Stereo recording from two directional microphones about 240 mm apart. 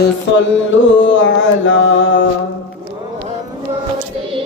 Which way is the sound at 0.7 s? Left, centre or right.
Left.